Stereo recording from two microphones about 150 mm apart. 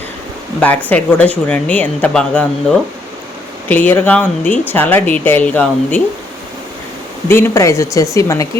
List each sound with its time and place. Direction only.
0.6 s speech: 10° left (ahead or behind)
7.3 s speech: 15° left (ahead or behind)